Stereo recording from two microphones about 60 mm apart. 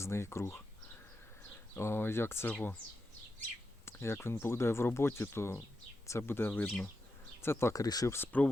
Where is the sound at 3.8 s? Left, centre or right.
Left.